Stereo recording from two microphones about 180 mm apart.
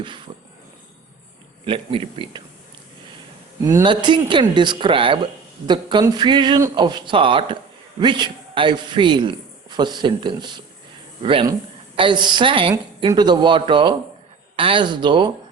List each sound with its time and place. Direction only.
0.3 s a sound: 25° right (ahead or behind)
1.6 s speech: 30° right (ahead or behind)
3.6 s speech: 15° right (ahead or behind)
3.8 s speech: 25° right (ahead or behind)